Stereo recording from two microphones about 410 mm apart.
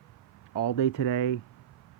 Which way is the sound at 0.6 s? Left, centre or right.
Left.